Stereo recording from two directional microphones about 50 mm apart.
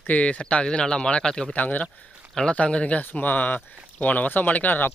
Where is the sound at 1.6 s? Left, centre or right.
Left.